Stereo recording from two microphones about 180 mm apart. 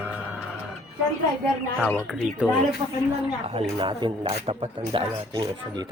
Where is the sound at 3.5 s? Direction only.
25° right (ahead or behind).